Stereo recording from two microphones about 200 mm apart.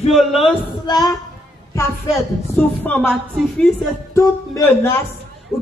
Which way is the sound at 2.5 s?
5° left (ahead or behind).